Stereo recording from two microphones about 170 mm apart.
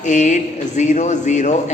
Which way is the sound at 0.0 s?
45° left (ahead or behind).